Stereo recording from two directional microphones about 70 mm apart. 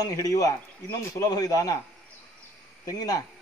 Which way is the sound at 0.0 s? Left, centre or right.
Left.